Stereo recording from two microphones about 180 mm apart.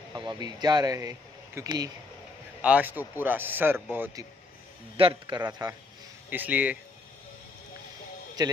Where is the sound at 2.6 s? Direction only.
10° right (ahead or behind).